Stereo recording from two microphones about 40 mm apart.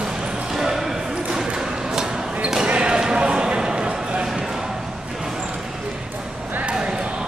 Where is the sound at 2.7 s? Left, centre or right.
Right.